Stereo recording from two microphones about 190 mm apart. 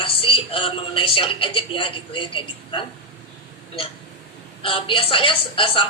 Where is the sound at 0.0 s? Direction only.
30° left (ahead or behind).